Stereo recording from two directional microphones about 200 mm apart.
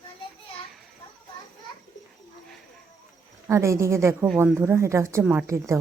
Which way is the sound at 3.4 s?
15° right (ahead or behind).